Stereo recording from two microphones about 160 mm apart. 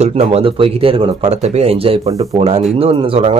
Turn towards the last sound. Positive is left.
turn(degrees=-35)  # may be behind; listen again after turning